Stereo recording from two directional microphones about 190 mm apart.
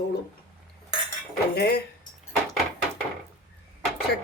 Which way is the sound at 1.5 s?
60° left (ahead or behind).